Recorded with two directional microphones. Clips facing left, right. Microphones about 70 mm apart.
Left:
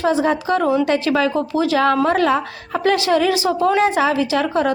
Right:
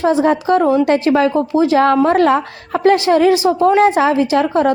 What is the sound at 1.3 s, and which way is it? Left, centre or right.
Speech, right.